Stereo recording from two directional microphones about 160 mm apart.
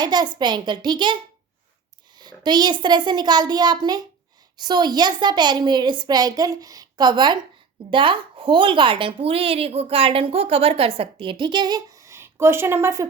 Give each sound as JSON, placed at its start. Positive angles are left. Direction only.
{"t": 0.0, "sound": "speech", "side_deg": -25}